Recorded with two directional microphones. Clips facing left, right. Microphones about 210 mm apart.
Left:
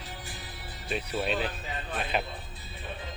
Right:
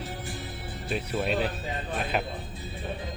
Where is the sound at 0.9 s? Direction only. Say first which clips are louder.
Right 2 dB; centre (ahead or behind).